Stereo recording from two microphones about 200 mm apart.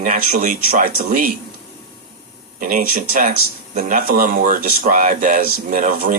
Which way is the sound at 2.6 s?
45° right (ahead or behind).